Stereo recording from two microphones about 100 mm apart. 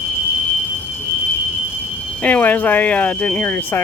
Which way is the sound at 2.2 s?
15° left (ahead or behind).